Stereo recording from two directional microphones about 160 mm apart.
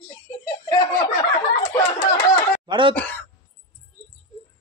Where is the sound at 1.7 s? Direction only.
15° left (ahead or behind).